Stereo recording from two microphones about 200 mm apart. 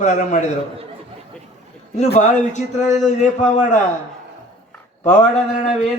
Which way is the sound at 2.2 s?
40° left (ahead or behind).